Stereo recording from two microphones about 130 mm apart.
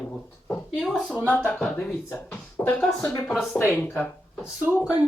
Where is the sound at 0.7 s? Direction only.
5° left (ahead or behind).